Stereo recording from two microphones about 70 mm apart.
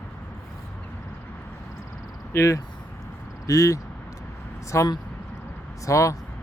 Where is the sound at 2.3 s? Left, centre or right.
Left.